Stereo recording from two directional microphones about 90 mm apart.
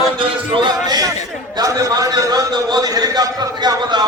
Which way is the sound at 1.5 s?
45° right (ahead or behind).